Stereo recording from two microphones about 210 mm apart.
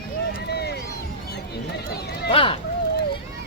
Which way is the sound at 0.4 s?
50° left (ahead or behind).